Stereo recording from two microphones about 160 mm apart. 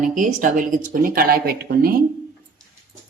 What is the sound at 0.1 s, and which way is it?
Speech, 55° right (ahead or behind).